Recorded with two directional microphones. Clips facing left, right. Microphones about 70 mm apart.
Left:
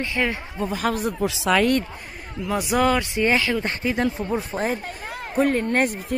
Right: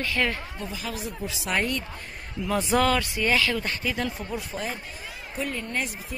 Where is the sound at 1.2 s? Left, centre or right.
Left.